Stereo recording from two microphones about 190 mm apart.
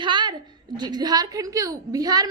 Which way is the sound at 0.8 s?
20° right (ahead or behind).